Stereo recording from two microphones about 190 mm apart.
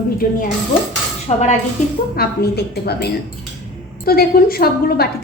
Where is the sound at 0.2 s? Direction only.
50° left (ahead or behind).